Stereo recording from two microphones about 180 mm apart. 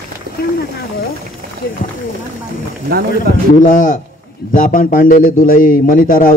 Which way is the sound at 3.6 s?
45° left (ahead or behind).